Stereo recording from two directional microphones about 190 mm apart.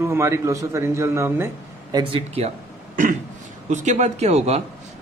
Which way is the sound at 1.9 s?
30° right (ahead or behind).